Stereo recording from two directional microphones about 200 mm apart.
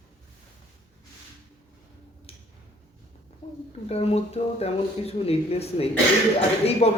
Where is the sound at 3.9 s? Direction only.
30° left (ahead or behind).